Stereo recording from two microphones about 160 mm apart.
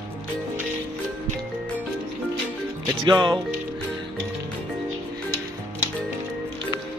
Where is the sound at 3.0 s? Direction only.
30° right (ahead or behind).